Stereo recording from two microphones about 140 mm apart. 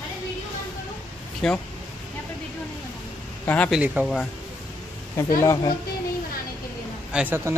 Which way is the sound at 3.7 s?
10° right (ahead or behind).